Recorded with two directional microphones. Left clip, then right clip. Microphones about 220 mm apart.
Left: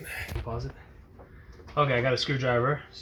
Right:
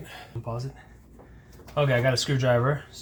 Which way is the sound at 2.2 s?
40° right (ahead or behind).